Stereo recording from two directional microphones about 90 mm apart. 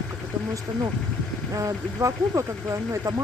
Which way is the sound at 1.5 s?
40° right (ahead or behind).